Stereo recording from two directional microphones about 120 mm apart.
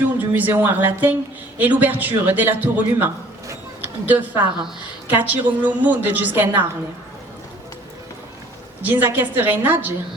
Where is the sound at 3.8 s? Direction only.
15° right (ahead or behind).